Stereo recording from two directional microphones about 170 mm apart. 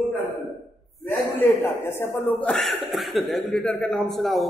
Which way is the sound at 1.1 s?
10° left (ahead or behind).